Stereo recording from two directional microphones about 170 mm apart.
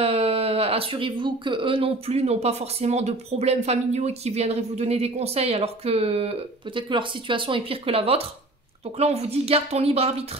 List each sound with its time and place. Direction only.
0.0 s speech: 35° right (ahead or behind)